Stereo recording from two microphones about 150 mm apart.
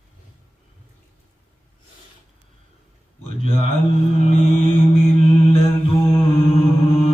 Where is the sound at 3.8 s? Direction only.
45° left (ahead or behind).